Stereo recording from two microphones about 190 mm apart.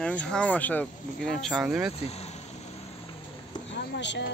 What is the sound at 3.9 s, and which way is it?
Speech, 70° left (ahead or behind).